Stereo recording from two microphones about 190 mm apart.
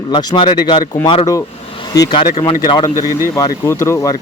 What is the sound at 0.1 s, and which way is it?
Speech, 20° left (ahead or behind).